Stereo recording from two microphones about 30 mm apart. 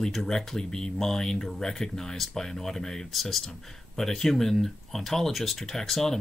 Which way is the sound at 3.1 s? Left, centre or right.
Centre.